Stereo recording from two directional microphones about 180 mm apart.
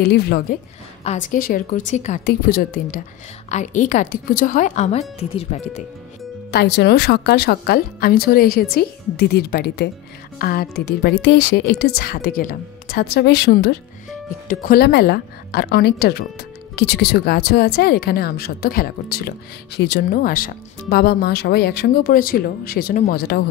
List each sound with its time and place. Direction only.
0.0 s a woman's voice: 65° left (ahead or behind)
1.0 s a woman's voice: 45° left (ahead or behind)
2.2 s a woman's voice: 55° left (ahead or behind)
3.4 s a woman's voice: 40° left (ahead or behind)
6.5 s a woman's voice: 70° left (ahead or behind)
14.5 s a woman's voice: 50° left (ahead or behind); by 20.0 s 70° left (ahead or behind)
20.1 s a woman's voice: 50° left (ahead or behind)